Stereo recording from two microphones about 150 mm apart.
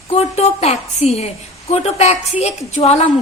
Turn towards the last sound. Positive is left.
turn(degrees=45)  # may be behind; listen again after turning